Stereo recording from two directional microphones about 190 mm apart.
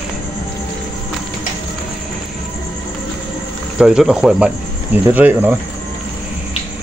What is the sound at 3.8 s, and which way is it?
Speech, 5° right (ahead or behind).